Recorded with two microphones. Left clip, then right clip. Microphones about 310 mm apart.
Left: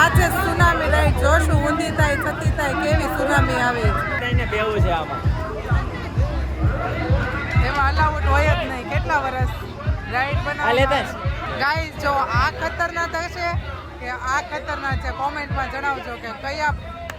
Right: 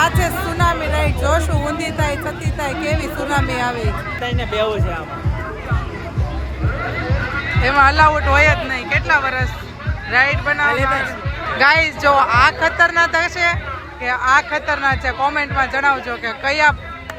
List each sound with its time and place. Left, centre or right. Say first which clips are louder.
0.0 s music: even; centre
4.2 s speech: right 3 dB; right
7.6 s speech: right 9 dB; centre